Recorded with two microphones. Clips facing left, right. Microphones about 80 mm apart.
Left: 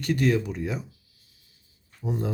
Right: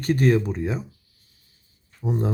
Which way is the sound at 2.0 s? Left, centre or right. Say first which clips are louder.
Right 4 dB; right.